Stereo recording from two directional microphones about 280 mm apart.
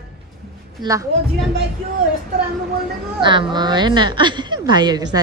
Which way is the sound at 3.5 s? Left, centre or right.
Centre.